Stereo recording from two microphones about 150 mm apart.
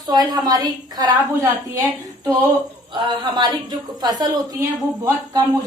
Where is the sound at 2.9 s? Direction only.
30° right (ahead or behind).